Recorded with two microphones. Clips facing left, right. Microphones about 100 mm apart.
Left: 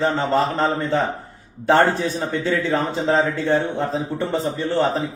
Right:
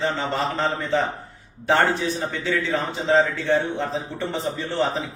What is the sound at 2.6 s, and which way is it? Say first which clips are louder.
A man's voice: left 3 dB; 35° left (ahead or behind).